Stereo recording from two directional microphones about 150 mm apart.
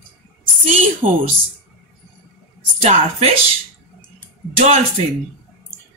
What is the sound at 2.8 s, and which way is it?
Speech, 45° right (ahead or behind).